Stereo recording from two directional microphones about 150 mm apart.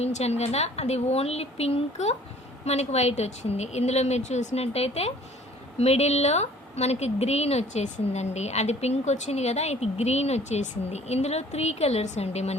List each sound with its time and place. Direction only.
0.0 s a woman's voice: 45° left (ahead or behind)